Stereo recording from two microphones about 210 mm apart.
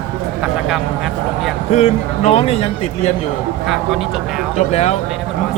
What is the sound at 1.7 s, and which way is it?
Speech, 30° left (ahead or behind).